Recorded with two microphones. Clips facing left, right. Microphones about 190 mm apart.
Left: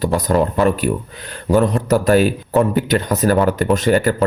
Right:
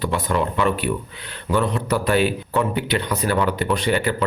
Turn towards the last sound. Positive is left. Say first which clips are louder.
# left 6 dB
turn(degrees=45)  # may be behind; listen again after turning